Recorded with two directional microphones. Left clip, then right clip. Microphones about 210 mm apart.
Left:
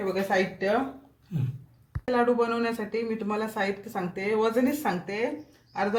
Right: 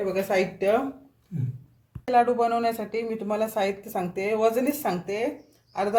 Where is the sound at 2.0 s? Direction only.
20° right (ahead or behind).